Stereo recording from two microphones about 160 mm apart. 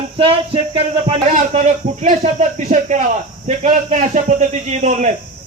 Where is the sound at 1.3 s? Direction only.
50° right (ahead or behind).